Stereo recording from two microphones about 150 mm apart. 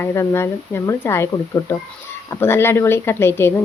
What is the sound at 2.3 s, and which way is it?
Speech, 15° left (ahead or behind).